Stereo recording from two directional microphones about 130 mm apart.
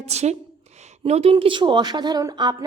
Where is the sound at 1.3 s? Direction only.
35° right (ahead or behind).